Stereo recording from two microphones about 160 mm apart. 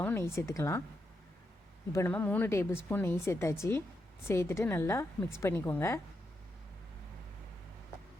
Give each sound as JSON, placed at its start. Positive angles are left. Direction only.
{"t": 0.0, "sound": "a woman's voice", "side_deg": 15}
{"t": 1.9, "sound": "a woman's voice", "side_deg": 15}